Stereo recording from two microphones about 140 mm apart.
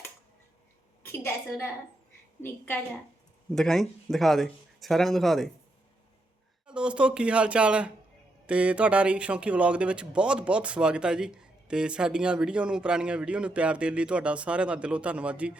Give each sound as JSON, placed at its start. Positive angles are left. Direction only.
{"t": 1.0, "sound": "a woman's voice", "side_deg": 15}
{"t": 3.5, "sound": "speech", "side_deg": 5}
{"t": 6.7, "sound": "speech", "side_deg": -5}